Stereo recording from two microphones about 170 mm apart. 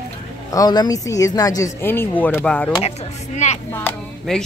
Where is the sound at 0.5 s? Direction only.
25° left (ahead or behind); by 2.7 s 5° left (ahead or behind).